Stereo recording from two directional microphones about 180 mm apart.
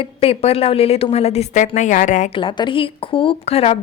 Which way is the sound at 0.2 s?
35° left (ahead or behind).